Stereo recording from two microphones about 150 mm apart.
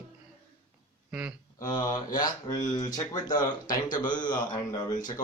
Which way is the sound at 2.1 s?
65° left (ahead or behind).